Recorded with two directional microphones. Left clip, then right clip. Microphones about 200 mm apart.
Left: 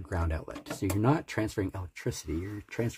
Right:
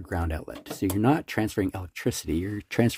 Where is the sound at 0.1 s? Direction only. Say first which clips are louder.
Right 4 dB; 25° right (ahead or behind).